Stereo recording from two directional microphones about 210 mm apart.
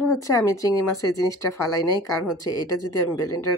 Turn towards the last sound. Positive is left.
turn(degrees=15)  # may be behind; listen again after turning